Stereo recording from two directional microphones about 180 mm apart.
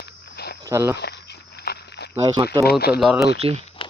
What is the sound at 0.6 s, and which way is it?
Speech, 15° right (ahead or behind).